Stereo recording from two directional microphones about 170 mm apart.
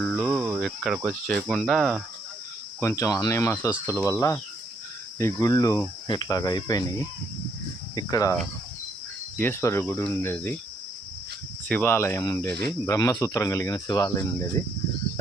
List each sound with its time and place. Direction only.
0.0 s cricket: 5° left (ahead or behind)
0.3 s cricket: 10° right (ahead or behind)
0.6 s cricket: centre (ahead or behind)
1.5 s speech: centre (ahead or behind)
2.8 s speech: 20° left (ahead or behind)
7.9 s speech: 20° left (ahead or behind)
9.4 s speech: 15° left (ahead or behind)
11.7 s speech: 10° left (ahead or behind)